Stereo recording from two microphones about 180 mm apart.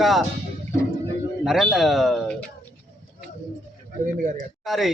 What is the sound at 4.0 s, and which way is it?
Speech, 45° right (ahead or behind).